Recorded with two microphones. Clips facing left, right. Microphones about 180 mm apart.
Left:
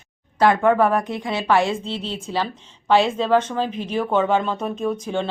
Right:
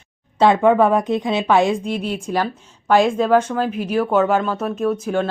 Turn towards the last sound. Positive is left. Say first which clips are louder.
# right 4 dB
turn(degrees=-5)  # may be behind; listen again after turning